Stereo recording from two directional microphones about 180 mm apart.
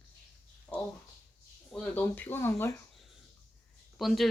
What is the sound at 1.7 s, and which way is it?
Speech, 5° left (ahead or behind).